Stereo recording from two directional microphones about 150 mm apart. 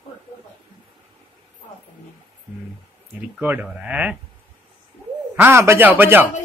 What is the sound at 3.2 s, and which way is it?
Speech, 10° right (ahead or behind).